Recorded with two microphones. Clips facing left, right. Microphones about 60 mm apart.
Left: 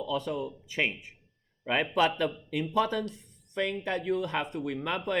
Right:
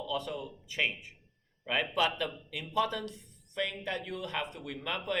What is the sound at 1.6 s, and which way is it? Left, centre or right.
Speech, left.